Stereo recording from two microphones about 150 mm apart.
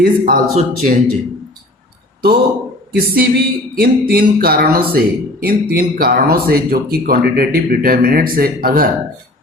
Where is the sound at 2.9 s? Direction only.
80° right.